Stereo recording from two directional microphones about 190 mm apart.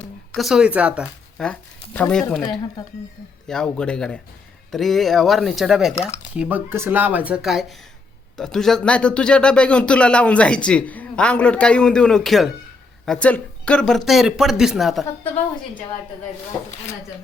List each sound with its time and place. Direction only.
0.3 s speech: centre (ahead or behind)
2.4 s speech: 25° left (ahead or behind)
3.4 s speech: 5° left (ahead or behind)